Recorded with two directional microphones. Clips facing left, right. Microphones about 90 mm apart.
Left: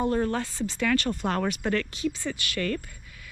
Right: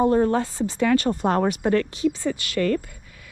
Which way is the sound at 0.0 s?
25° right (ahead or behind).